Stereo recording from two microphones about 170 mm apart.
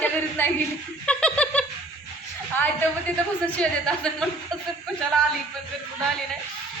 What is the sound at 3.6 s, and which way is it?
Speech, 5° left (ahead or behind).